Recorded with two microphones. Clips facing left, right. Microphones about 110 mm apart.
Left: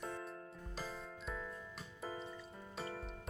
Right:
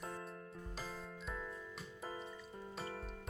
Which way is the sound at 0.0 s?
Centre (ahead or behind).